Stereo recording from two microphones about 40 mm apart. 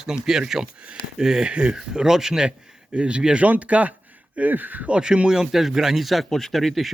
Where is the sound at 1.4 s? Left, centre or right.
Right.